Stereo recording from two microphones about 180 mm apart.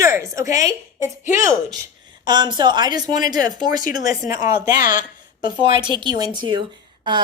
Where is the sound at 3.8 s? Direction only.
50° left (ahead or behind).